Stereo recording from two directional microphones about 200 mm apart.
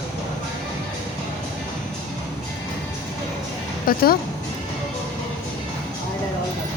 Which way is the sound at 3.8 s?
50° left (ahead or behind).